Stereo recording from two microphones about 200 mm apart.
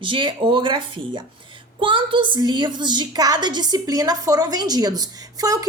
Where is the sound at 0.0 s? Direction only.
25° right (ahead or behind).